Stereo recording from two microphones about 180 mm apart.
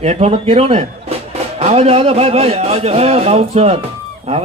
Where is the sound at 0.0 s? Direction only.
35° right (ahead or behind).